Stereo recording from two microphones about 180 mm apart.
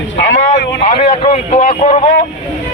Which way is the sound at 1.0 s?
35° left (ahead or behind).